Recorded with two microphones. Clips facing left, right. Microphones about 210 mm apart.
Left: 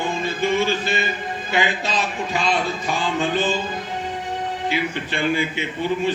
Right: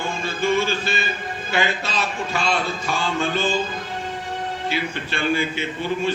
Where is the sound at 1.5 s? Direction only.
15° left (ahead or behind).